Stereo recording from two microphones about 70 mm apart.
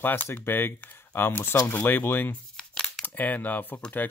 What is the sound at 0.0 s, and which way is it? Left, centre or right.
Speech, left.